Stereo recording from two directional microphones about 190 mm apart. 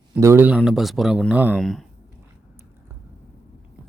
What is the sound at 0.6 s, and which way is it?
Speech, centre (ahead or behind).